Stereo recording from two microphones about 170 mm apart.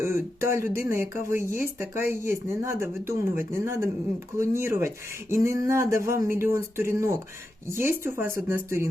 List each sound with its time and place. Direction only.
0.0 s speech: 15° right (ahead or behind)